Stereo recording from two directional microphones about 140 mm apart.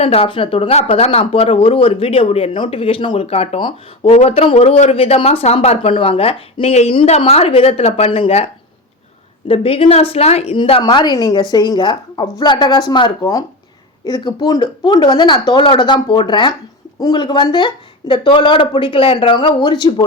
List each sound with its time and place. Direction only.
0.0 s speech: 45° left (ahead or behind)
4.1 s speech: 50° left (ahead or behind)
9.5 s speech: 40° left (ahead or behind)
10.8 s speech: 30° left (ahead or behind)